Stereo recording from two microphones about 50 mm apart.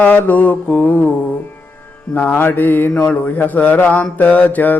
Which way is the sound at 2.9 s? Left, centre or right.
Left.